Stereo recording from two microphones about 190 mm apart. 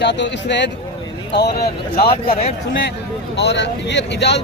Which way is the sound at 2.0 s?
30° left (ahead or behind).